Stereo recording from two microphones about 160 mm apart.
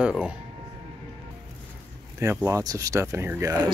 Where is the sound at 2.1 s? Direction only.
20° right (ahead or behind).